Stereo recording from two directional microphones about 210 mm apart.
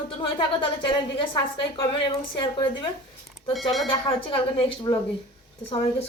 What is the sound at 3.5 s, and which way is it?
Speech, centre (ahead or behind).